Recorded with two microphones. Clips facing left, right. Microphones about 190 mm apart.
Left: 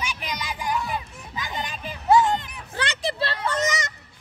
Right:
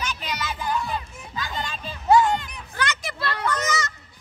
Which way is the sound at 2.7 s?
30° left (ahead or behind).